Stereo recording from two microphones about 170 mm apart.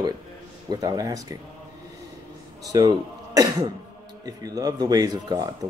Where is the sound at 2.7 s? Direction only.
20° right (ahead or behind).